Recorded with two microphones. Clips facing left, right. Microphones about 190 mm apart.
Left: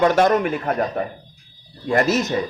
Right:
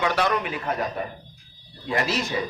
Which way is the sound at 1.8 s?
45° left (ahead or behind).